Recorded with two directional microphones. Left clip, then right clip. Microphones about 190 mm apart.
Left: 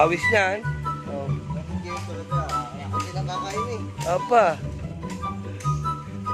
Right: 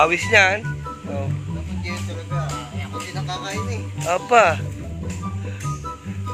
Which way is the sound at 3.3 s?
10° left (ahead or behind).